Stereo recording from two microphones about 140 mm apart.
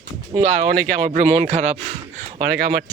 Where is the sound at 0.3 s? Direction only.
55° right (ahead or behind).